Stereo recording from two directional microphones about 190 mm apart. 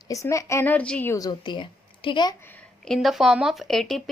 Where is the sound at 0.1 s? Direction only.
15° left (ahead or behind).